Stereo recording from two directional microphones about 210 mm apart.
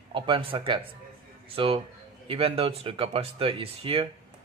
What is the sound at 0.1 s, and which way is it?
Speech, 25° right (ahead or behind).